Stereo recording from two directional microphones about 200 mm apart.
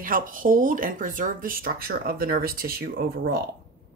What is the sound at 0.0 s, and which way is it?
A woman's voice, 45° right (ahead or behind).